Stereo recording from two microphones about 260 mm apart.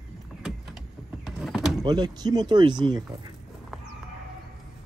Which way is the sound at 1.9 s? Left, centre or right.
Centre.